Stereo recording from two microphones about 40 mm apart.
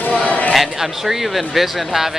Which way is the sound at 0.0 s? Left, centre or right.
Left.